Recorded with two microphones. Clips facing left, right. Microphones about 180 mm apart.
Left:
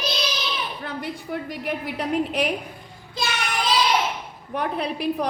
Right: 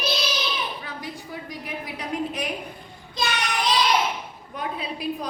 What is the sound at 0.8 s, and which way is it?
A woman's voice, 60° left (ahead or behind).